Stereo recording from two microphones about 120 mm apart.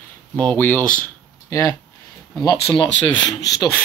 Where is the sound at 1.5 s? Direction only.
20° left (ahead or behind).